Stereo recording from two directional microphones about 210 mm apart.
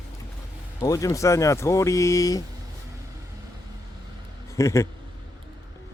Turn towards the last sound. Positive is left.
turn(degrees=15)  # may be behind; listen again after turning